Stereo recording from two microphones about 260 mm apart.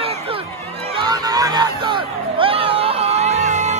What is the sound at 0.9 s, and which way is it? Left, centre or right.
Music, centre.